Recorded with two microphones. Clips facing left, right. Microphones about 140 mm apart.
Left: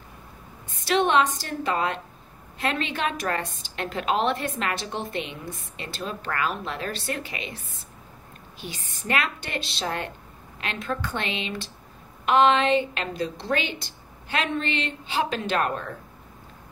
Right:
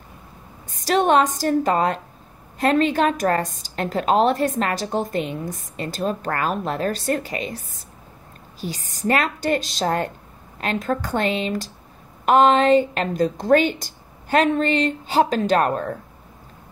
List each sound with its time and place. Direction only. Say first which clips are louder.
0.7 s a woman's voice: right 5 dB; 40° right (ahead or behind)